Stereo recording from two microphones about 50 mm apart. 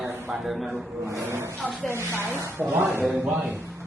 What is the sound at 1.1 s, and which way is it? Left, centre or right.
Speech, right.